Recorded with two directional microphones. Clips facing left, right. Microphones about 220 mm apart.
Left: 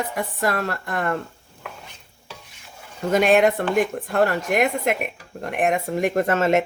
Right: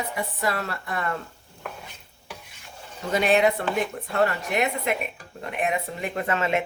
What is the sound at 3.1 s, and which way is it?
A woman's voice, 50° left (ahead or behind).